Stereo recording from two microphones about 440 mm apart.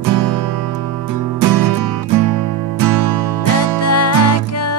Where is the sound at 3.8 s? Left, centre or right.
Left.